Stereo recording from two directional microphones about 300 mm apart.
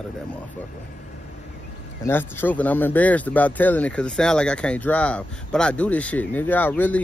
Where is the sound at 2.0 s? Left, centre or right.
Centre.